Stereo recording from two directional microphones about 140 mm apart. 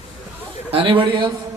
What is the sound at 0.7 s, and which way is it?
Speech, 40° right (ahead or behind).